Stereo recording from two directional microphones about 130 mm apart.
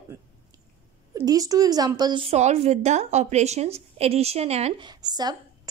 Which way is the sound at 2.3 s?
60° right (ahead or behind).